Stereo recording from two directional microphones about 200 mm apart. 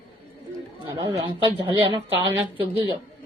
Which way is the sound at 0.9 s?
25° right (ahead or behind).